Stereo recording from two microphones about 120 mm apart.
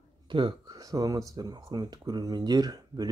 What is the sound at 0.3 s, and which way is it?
Speech, 40° right (ahead or behind).